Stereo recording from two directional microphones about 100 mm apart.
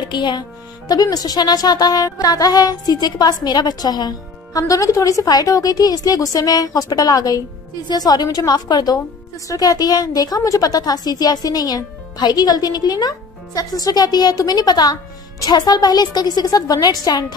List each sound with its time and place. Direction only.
0.1 s a woman's voice: 50° left (ahead or behind)